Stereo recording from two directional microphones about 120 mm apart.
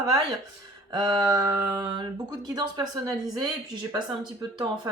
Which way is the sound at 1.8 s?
40° right (ahead or behind).